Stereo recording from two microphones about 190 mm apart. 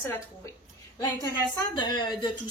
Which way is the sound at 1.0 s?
20° left (ahead or behind).